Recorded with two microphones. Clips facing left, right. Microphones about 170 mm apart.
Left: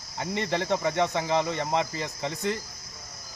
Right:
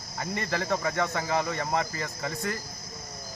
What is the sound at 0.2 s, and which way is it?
Speech, 25° left (ahead or behind).